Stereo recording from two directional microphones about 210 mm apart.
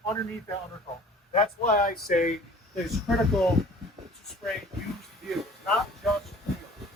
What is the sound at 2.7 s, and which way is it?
Speech, centre (ahead or behind).